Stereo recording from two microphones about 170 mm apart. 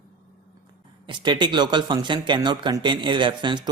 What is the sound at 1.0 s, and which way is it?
Speech, 25° right (ahead or behind).